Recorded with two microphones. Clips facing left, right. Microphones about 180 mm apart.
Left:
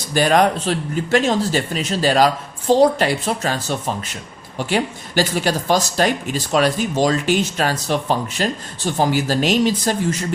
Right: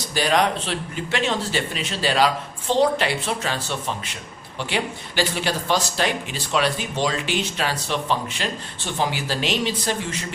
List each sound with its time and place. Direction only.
0.1 s speech: 50° left (ahead or behind)